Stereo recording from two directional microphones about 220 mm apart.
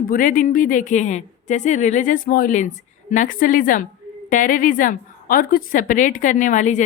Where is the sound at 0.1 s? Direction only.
35° left (ahead or behind).